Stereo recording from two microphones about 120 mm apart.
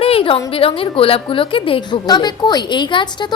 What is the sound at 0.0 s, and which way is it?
A woman's voice, 50° left (ahead or behind).